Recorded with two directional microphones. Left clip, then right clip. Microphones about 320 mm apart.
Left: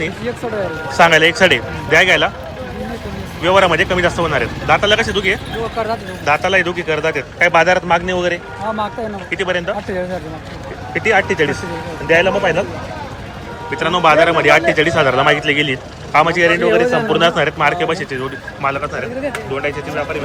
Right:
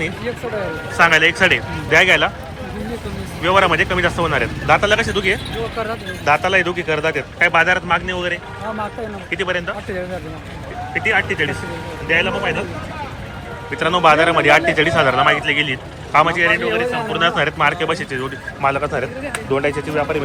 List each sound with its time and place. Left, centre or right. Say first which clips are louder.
0.9 s speech: left 3 dB; centre
3.4 s speech: left 2 dB; centre
5.7 s speech: left 6 dB; left
6.2 s speech: left 1 dB; centre
10.9 s a man's voice: left 3 dB; centre
13.7 s speech: left 1 dB; centre